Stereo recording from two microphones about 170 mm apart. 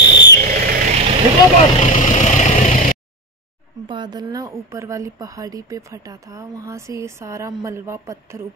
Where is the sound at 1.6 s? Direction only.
45° left (ahead or behind).